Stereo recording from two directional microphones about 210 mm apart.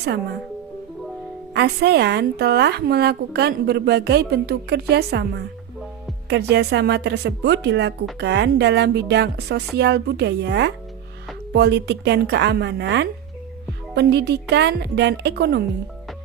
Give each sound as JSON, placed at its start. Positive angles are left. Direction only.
{"t": 1.5, "sound": "a woman's voice", "side_deg": -50}